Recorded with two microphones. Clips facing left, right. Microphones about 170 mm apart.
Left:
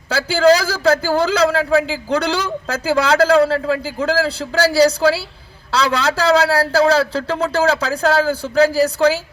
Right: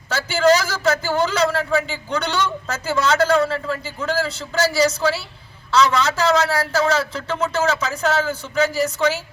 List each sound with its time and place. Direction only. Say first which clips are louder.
0.1 s speech: left 3 dB; 35° left (ahead or behind)